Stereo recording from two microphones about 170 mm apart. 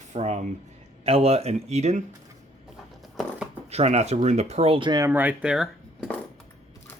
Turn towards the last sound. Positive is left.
turn(degrees=-5)  # may be behind; listen again after turning